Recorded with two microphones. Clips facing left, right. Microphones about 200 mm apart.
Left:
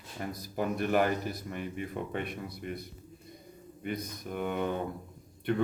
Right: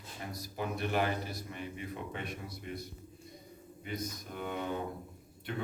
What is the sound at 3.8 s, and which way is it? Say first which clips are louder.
Speech: left 4 dB; 55° left (ahead or behind).